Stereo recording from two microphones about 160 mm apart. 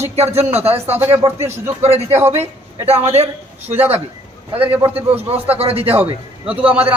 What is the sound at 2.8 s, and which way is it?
Speech, 40° right (ahead or behind).